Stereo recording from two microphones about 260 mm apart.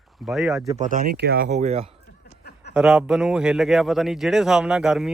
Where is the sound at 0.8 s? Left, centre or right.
Right.